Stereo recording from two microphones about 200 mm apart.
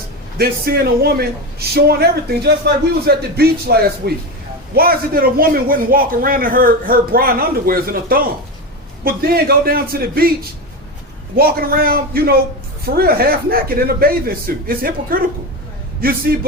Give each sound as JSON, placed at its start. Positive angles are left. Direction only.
{"t": 0.3, "sound": "a man's voice", "side_deg": -50}
{"t": 11.3, "sound": "a man's voice", "side_deg": -50}